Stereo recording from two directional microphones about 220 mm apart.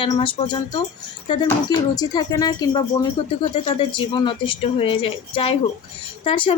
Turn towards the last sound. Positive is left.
turn(degrees=25)  # may be behind; listen again after turning